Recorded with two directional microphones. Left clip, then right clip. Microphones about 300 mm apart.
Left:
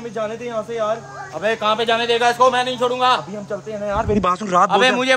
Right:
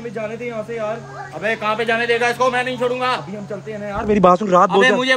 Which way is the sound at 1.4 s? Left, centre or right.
Centre.